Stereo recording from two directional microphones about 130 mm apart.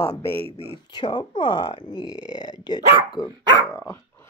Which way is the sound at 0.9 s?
35° left (ahead or behind).